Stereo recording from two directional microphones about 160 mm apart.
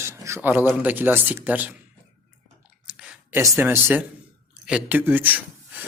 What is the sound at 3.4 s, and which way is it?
A man's voice, 15° right (ahead or behind).